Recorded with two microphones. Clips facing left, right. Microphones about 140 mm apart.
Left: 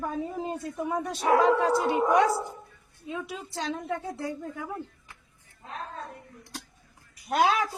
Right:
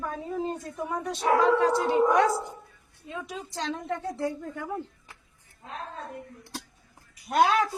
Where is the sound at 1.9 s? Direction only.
10° left (ahead or behind).